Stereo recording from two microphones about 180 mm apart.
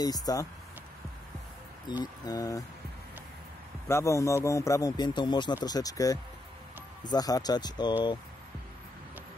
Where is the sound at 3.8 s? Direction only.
15° left (ahead or behind).